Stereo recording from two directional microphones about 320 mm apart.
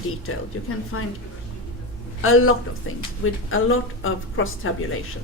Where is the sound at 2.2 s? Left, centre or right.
Left.